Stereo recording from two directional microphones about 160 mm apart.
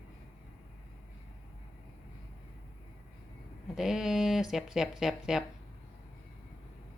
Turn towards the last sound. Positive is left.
turn(degrees=-5)  # may be behind; listen again after turning